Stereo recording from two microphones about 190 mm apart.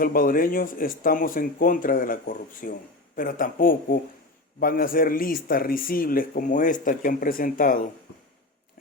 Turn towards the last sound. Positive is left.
turn(degrees=45)  # may be behind; listen again after turning